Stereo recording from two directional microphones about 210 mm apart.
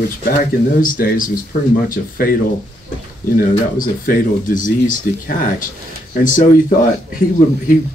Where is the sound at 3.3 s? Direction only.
40° left (ahead or behind).